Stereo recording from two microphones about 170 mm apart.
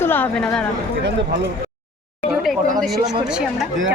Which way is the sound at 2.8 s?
Centre (ahead or behind).